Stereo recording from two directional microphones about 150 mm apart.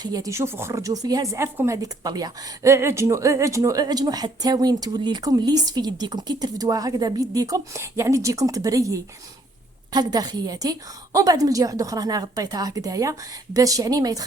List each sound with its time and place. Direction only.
0.0 s speech: 25° right (ahead or behind)